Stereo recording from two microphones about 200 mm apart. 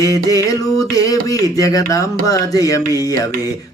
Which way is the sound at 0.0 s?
15° left (ahead or behind).